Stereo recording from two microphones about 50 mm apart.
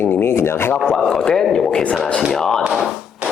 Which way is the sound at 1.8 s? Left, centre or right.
Left.